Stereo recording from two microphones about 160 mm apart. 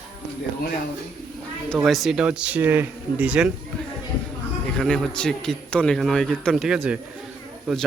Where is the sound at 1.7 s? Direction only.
Centre (ahead or behind).